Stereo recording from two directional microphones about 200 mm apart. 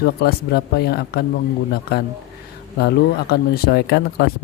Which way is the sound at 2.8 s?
50° left (ahead or behind).